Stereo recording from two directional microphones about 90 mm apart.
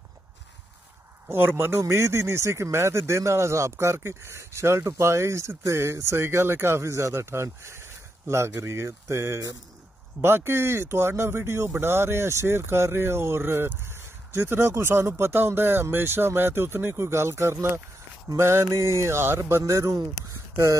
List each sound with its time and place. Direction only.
1.3 s speech: 25° right (ahead or behind)